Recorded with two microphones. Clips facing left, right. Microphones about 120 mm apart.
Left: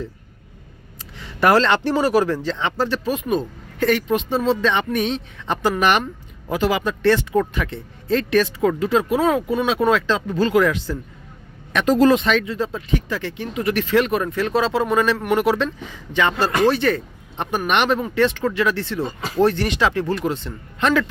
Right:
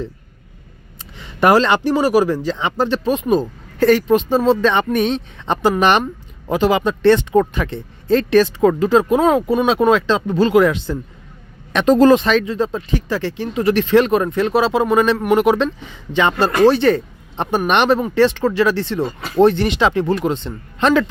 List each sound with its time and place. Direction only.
1.2 s a man's voice: 20° right (ahead or behind)